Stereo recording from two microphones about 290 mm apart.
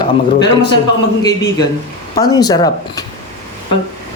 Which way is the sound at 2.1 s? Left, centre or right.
Centre.